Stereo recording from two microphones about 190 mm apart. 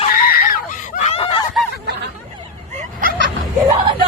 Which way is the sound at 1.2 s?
30° left (ahead or behind).